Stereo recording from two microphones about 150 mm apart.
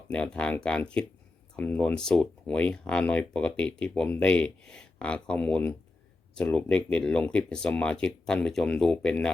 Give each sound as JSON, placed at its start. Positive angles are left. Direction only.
{"t": 0.1, "sound": "speech", "side_deg": 5}